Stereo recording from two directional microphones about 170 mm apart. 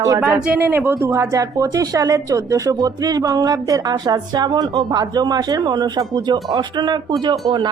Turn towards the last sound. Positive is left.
turn(degrees=-25)  # may be behind; listen again after turning